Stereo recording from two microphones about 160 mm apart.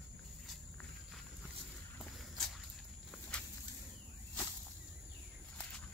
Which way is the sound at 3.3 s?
5° left (ahead or behind).